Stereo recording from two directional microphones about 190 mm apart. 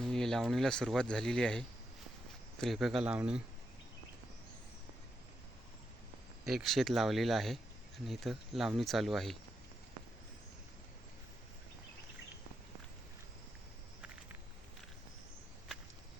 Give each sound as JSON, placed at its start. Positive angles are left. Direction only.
{"t": 0.0, "sound": "speech", "side_deg": 0}
{"t": 6.5, "sound": "speech", "side_deg": 0}